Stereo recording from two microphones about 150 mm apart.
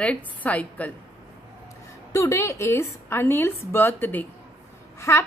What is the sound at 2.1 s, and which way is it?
A woman's voice, 20° left (ahead or behind).